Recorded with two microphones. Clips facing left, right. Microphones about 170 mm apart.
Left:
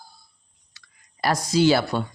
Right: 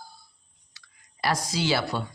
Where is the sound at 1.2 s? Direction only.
50° left (ahead or behind).